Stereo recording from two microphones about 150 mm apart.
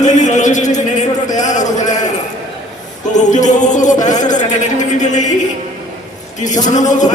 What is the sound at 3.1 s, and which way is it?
A man's voice, 55° left (ahead or behind).